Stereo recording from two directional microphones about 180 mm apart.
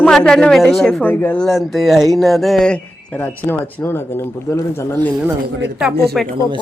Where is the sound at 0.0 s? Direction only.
5° left (ahead or behind).